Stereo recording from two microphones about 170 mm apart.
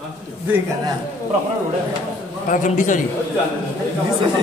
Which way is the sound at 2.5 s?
50° left (ahead or behind).